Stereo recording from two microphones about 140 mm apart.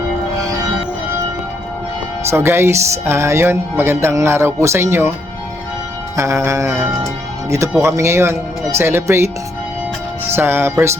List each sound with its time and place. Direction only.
2.3 s speech: 15° right (ahead or behind)
6.1 s speech: 20° right (ahead or behind)
10.3 s speech: 15° right (ahead or behind)